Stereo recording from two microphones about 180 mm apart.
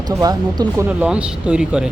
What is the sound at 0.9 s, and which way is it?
Speech, 5° right (ahead or behind).